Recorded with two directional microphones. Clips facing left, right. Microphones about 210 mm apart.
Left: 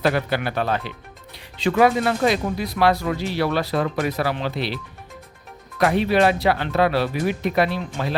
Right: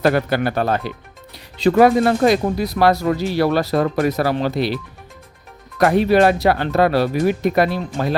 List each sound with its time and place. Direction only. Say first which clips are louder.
0.0 s speech: right 4 dB; 45° right (ahead or behind)
5.8 s speech: right 4 dB; 45° right (ahead or behind)